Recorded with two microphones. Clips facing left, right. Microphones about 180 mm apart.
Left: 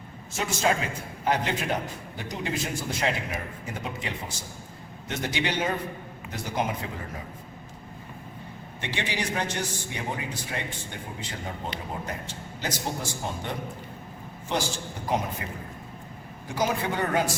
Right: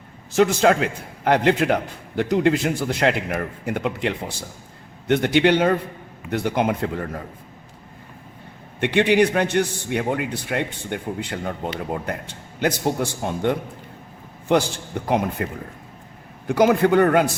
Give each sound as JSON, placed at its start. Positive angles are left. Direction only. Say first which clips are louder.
{"t": 0.3, "sound": "a man's voice", "louder": "right 10 dB", "side_deg": -70}
{"t": 8.8, "sound": "a man's voice", "louder": "right 15 dB", "side_deg": -60}
{"t": 15.0, "sound": "a man's voice", "louder": "right 7 dB", "side_deg": -60}
{"t": 16.5, "sound": "a man's voice", "louder": "right 11 dB", "side_deg": -60}